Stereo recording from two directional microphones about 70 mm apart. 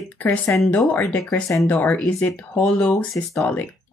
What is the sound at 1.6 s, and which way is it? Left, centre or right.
Speech, left.